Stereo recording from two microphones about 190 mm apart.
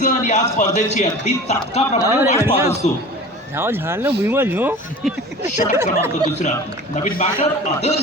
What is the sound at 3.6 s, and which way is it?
Speech, 10° right (ahead or behind).